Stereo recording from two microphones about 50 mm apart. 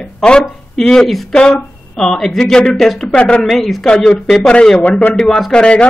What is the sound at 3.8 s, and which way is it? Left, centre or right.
A man's voice, centre.